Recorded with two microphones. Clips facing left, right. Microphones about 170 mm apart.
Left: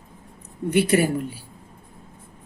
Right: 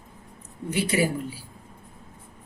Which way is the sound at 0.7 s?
60° left (ahead or behind).